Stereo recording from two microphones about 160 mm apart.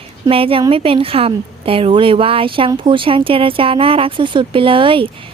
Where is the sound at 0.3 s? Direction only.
35° right (ahead or behind).